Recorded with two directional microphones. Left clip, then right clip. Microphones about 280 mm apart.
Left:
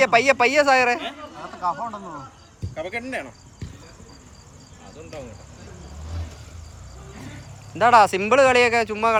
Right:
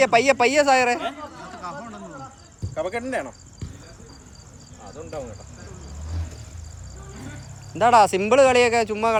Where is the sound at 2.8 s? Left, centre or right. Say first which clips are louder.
Right 3 dB; right.